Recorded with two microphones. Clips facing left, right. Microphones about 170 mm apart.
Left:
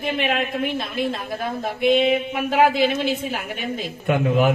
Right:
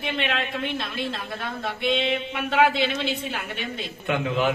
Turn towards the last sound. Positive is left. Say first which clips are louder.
# left 5 dB
turn(degrees=45)  # may be behind; listen again after turning